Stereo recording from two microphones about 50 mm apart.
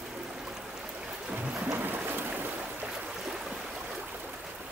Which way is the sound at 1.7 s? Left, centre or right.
Right.